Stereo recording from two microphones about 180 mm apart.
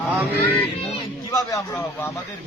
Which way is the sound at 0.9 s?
20° left (ahead or behind).